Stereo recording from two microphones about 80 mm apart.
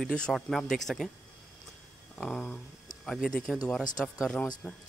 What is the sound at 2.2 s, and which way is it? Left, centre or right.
Speech, centre.